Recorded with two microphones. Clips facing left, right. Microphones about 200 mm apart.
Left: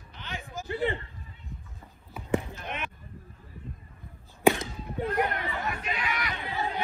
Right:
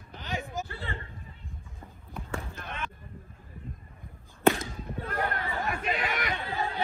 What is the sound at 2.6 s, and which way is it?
Basketball bounce, 20° left (ahead or behind).